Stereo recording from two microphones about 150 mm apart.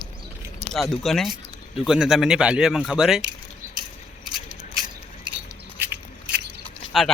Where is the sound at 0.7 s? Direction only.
Centre (ahead or behind).